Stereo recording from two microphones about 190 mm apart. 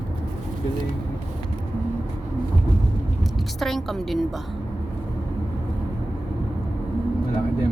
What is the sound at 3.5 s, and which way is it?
Speech, centre (ahead or behind).